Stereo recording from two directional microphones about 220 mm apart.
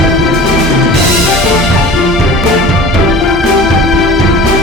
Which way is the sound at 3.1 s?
Centre (ahead or behind).